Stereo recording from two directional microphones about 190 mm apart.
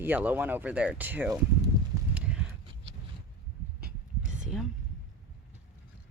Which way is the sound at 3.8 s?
40° right (ahead or behind).